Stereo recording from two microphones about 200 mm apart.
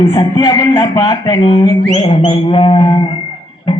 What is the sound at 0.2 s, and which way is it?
Speech, 20° left (ahead or behind).